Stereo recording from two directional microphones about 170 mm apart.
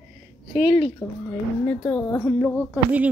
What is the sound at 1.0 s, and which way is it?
Speech, 20° left (ahead or behind).